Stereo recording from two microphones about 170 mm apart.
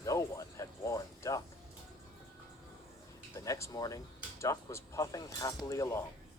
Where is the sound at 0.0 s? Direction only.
20° left (ahead or behind).